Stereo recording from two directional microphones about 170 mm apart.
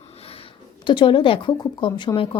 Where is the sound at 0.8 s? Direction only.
30° left (ahead or behind).